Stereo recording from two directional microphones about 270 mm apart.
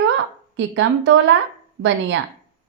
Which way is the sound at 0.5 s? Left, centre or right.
Right.